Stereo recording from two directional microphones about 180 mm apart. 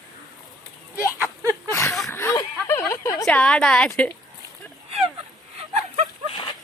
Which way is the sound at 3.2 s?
5° left (ahead or behind).